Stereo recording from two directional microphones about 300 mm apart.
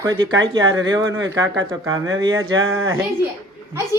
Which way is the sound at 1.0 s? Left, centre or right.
Right.